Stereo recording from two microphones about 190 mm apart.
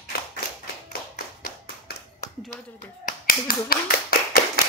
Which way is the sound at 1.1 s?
55° left (ahead or behind).